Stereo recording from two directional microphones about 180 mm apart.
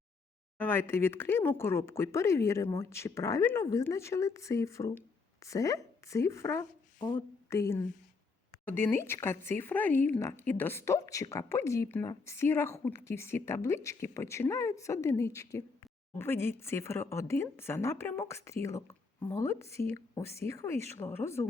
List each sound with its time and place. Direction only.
0.6 s speech: 10° left (ahead or behind)